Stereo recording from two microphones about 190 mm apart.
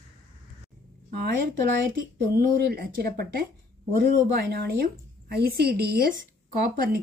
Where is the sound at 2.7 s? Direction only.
55° right (ahead or behind).